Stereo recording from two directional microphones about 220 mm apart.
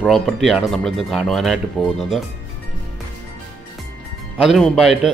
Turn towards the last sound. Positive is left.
turn(degrees=0)  # may be behind; listen again after turning